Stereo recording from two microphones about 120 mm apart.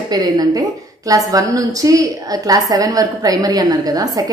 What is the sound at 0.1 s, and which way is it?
A woman's voice, 30° right (ahead or behind).